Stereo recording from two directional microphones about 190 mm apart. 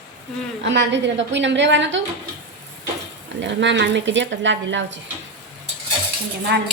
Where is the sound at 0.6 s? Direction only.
70° right (ahead or behind).